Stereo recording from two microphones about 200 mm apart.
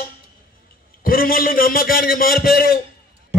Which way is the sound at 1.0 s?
45° left (ahead or behind).